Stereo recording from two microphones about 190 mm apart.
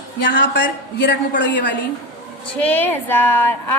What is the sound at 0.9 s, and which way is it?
Speech, 65° left (ahead or behind).